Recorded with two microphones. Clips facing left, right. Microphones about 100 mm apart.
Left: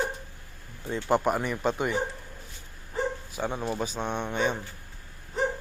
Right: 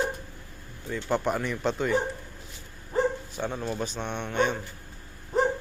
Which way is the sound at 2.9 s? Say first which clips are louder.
Right 5 dB; 35° right (ahead or behind).